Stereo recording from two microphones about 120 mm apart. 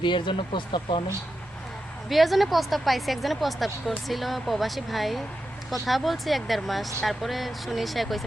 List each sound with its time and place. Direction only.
0.0 s speech: 40° left (ahead or behind)
2.0 s a woman's voice: centre (ahead or behind)